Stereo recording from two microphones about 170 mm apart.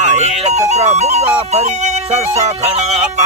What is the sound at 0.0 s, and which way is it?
Music, 45° right (ahead or behind).